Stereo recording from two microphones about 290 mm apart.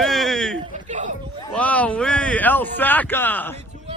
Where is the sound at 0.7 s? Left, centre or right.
Right.